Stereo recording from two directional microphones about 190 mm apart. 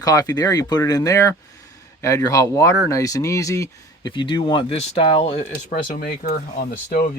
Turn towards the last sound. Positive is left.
turn(degrees=50)  # may be behind; listen again after turning